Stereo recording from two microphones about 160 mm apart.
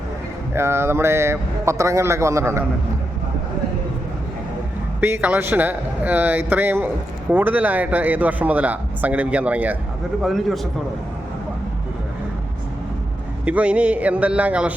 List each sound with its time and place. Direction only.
0.5 s a man's voice: 15° right (ahead or behind)
4.9 s a man's voice: 10° right (ahead or behind)
13.4 s a man's voice: 10° right (ahead or behind)